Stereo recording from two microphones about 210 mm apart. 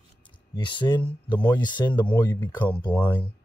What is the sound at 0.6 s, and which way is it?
Speech, 25° left (ahead or behind).